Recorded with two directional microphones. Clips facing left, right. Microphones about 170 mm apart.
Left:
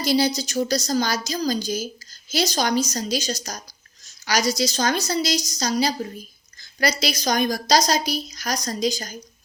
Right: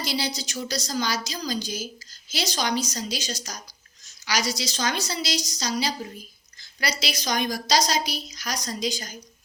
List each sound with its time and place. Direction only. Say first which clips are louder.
0.0 s a woman's voice: left 8 dB; 45° left (ahead or behind)
7.0 s a woman's voice: left 2 dB; 40° left (ahead or behind)